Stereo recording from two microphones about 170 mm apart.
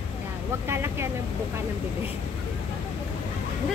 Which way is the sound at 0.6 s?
15° right (ahead or behind).